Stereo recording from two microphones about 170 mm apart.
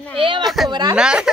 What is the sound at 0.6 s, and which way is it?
Speech, 25° right (ahead or behind).